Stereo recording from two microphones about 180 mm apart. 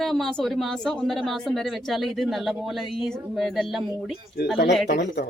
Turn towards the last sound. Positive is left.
turn(degrees=70)  # may be behind; listen again after turning